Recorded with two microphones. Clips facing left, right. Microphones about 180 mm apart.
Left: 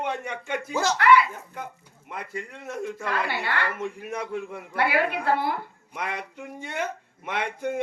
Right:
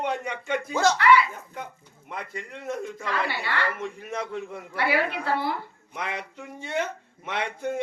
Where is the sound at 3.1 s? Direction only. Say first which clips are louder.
Even; 50° left (ahead or behind).